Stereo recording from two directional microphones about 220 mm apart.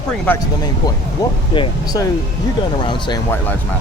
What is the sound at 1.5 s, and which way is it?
Speech, 20° left (ahead or behind).